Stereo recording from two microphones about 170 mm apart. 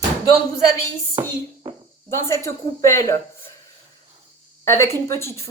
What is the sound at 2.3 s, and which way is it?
Speech, 15° left (ahead or behind).